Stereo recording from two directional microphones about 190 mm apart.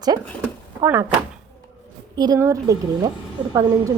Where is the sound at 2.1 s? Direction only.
20° right (ahead or behind).